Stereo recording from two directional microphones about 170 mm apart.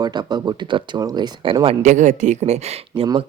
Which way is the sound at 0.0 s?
25° right (ahead or behind).